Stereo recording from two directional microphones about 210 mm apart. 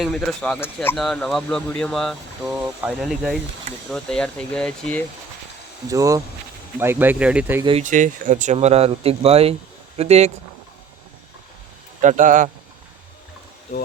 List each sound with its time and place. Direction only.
0.0 s speech: centre (ahead or behind)
5.9 s speech: 15° right (ahead or behind)
7.6 s speech: 25° right (ahead or behind)
7.9 s speech: 35° right (ahead or behind)
12.0 s speech: 35° right (ahead or behind)